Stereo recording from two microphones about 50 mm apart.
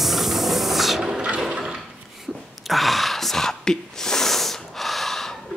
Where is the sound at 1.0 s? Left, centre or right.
Centre.